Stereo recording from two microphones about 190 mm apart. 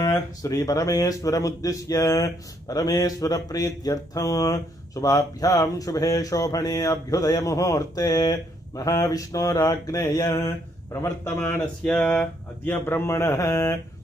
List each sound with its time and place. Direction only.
0.0 s speech: 15° left (ahead or behind)